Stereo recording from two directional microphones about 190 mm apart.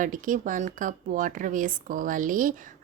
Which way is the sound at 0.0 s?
45° right (ahead or behind).